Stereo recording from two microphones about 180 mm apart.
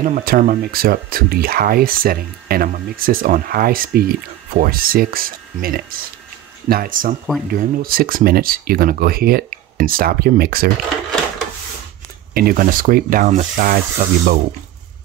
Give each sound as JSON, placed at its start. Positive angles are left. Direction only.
{"t": 0.0, "sound": "speech", "side_deg": -50}
{"t": 12.4, "sound": "speech", "side_deg": -55}